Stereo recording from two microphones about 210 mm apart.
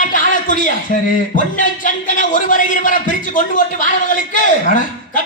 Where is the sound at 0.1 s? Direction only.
40° left (ahead or behind).